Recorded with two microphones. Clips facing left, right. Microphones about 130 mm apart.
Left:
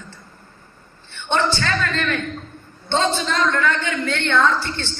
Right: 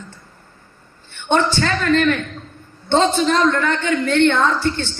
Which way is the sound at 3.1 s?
40° right (ahead or behind).